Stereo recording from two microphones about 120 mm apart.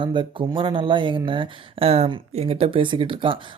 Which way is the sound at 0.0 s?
45° right (ahead or behind).